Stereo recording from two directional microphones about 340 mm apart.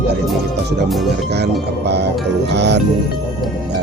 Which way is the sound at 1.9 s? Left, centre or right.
Right.